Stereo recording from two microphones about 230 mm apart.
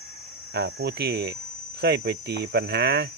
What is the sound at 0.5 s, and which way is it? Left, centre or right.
Speech, right.